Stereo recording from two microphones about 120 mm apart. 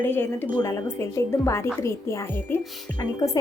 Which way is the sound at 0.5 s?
30° left (ahead or behind).